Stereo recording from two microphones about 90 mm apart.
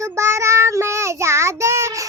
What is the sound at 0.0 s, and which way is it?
Child singing, 35° right (ahead or behind).